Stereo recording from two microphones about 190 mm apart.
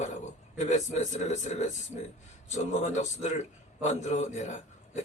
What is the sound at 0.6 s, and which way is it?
A man's voice, 40° left (ahead or behind).